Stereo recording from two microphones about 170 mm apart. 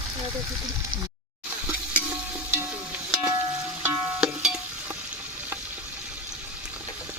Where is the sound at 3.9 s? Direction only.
5° right (ahead or behind).